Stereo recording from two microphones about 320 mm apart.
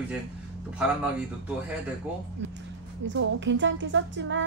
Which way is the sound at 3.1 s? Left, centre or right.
Right.